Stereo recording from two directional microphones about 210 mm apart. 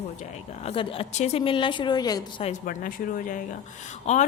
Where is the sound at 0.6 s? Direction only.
25° left (ahead or behind).